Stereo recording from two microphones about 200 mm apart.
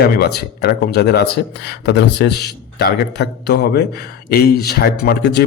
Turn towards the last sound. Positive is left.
turn(degrees=55)  # may be behind; listen again after turning